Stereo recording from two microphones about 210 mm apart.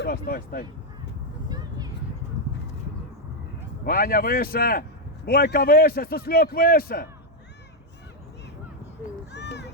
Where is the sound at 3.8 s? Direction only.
45° left (ahead or behind).